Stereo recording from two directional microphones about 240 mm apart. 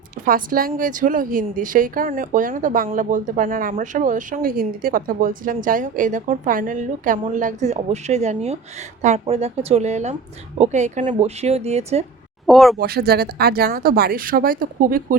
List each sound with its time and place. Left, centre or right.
0.3 s a woman's voice: right
12.5 s speech: centre
12.8 s a woman's voice: right